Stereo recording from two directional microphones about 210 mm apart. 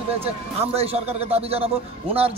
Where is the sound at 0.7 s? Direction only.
30° right (ahead or behind).